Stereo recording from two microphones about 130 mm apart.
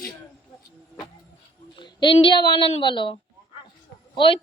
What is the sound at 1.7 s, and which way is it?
A woman's voice, 35° left (ahead or behind).